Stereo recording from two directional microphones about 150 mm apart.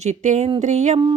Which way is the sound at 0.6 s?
50° right (ahead or behind).